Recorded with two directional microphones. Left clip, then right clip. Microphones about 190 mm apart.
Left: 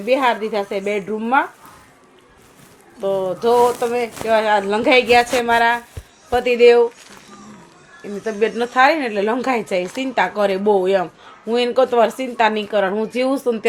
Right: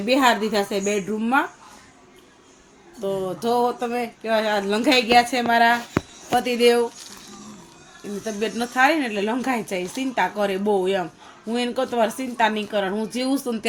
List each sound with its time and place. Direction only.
0.0 s speech: 40° right (ahead or behind)
3.0 s a woman's voice: 35° right (ahead or behind); by 6.8 s 15° right (ahead or behind)
8.2 s a woman's voice: 20° right (ahead or behind)